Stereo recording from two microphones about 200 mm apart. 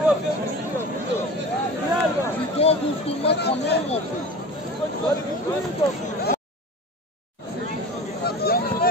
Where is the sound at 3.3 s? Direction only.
55° left (ahead or behind).